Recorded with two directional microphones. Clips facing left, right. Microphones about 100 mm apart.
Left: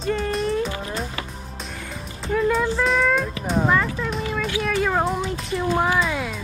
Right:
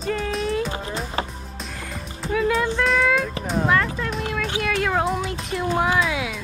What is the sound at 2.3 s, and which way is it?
Music, centre (ahead or behind).